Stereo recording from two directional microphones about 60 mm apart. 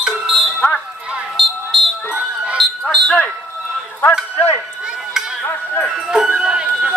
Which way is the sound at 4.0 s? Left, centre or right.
Left.